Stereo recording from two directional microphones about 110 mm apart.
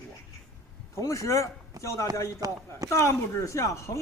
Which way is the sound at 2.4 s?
30° right (ahead or behind).